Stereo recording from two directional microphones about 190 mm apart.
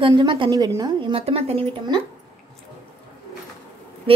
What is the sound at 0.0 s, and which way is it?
A woman's voice, 25° right (ahead or behind).